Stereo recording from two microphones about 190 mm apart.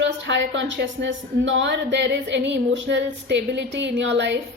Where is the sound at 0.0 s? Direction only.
70° right (ahead or behind).